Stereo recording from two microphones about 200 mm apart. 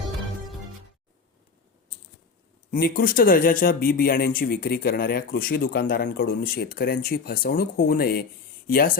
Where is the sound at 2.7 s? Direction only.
50° left (ahead or behind).